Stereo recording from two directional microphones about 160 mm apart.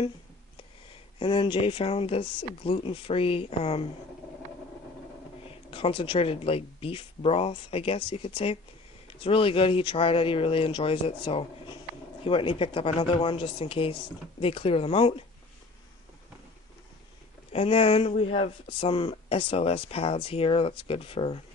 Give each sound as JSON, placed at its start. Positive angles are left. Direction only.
{"t": 1.2, "sound": "speech", "side_deg": 35}
{"t": 5.5, "sound": "speech", "side_deg": 35}
{"t": 17.5, "sound": "speech", "side_deg": 40}